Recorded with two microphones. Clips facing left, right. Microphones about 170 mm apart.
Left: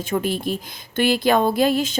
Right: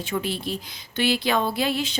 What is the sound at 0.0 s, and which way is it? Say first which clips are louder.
A woman's voice: left 5 dB; 50° left (ahead or behind).